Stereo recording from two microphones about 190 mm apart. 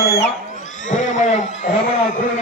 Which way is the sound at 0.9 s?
40° left (ahead or behind).